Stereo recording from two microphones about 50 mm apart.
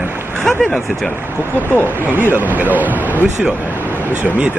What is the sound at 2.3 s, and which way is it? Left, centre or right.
Speech, right.